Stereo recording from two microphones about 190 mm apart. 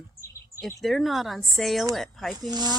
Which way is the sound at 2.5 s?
20° right (ahead or behind).